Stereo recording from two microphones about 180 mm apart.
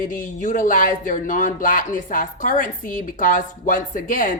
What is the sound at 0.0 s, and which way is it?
Speech, 45° left (ahead or behind).